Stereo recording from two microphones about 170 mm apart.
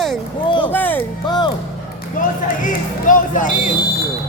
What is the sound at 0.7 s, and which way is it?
Music, 10° left (ahead or behind).